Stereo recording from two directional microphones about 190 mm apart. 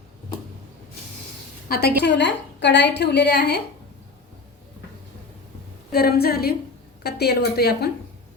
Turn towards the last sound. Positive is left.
turn(degrees=55)  # may be behind; listen again after turning